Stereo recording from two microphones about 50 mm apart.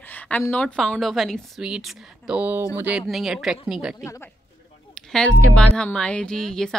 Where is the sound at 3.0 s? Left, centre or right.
Centre.